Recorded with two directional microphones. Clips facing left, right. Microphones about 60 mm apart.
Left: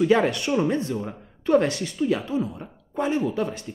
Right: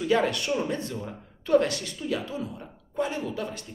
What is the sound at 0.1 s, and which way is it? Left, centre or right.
Speech, left.